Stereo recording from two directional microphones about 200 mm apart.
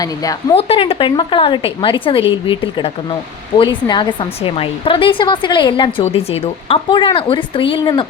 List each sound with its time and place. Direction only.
0.0 s a woman's voice: 20° left (ahead or behind)
0.5 s speech: 30° left (ahead or behind)